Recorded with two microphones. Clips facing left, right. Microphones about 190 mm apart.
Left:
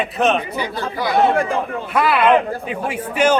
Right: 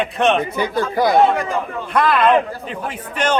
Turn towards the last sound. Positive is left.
turn(degrees=10)  # may be behind; listen again after turning